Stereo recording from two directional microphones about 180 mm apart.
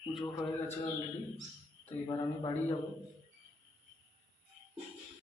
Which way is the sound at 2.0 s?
15° left (ahead or behind).